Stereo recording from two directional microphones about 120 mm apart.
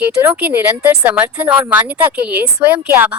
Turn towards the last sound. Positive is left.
turn(degrees=-15)  # may be behind; listen again after turning